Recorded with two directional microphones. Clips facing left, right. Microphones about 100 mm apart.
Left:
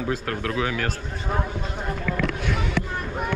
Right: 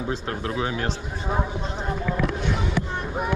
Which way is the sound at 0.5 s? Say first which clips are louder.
Left 1 dB; 15° right (ahead or behind).